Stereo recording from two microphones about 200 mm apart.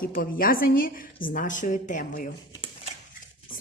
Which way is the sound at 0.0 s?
45° left (ahead or behind).